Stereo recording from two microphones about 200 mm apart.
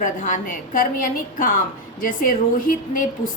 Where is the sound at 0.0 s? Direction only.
40° left (ahead or behind).